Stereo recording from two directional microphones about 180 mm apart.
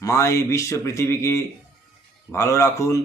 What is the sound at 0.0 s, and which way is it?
A man's voice, 15° left (ahead or behind).